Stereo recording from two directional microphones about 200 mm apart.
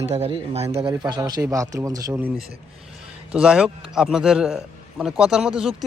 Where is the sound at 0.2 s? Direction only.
30° right (ahead or behind).